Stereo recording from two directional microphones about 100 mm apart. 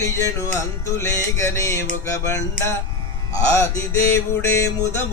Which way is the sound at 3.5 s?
30° left (ahead or behind).